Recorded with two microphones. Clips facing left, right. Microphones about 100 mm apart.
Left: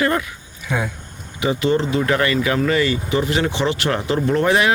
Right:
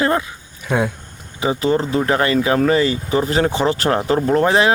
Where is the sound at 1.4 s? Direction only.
35° right (ahead or behind).